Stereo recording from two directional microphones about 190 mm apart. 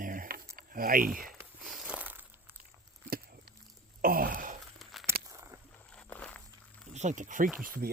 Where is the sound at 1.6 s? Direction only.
5° right (ahead or behind).